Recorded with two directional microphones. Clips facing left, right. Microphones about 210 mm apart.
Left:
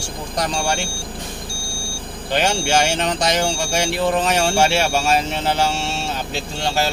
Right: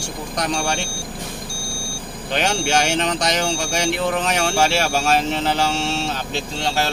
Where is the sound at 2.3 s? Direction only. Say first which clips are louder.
Left 2 dB; centre (ahead or behind).